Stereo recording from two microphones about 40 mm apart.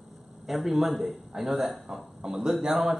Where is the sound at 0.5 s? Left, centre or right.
Centre.